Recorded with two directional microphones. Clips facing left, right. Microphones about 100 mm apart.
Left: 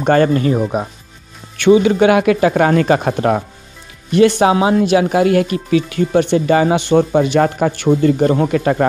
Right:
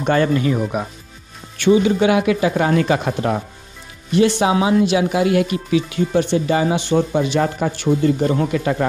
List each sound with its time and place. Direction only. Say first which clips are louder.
0.0 s speech: left 4 dB; 50° left (ahead or behind)
0.6 s speech: left 4 dB; 30° left (ahead or behind)
1.6 s speech: left 4 dB; 75° left (ahead or behind); by 4.6 s 55° left (ahead or behind)
4.6 s speech: left 3 dB; 45° left (ahead or behind)